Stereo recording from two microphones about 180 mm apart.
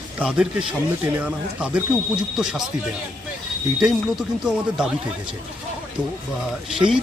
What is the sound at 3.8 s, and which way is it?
Speech, 5° right (ahead or behind).